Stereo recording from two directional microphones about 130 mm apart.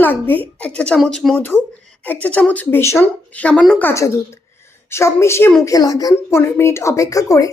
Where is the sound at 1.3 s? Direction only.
15° left (ahead or behind).